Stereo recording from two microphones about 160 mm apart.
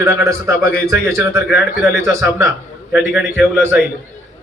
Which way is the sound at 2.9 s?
10° right (ahead or behind).